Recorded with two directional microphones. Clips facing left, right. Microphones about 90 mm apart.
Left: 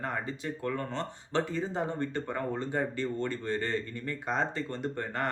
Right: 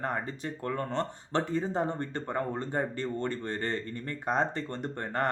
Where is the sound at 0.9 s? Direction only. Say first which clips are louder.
Right 4 dB; 50° right (ahead or behind).